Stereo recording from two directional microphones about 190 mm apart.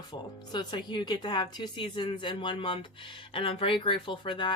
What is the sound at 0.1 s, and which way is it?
Speech, 25° left (ahead or behind).